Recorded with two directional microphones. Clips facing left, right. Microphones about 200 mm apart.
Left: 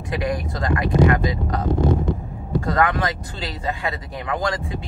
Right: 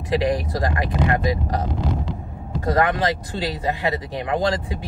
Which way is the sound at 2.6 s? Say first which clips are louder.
Right 2 dB; 25° right (ahead or behind).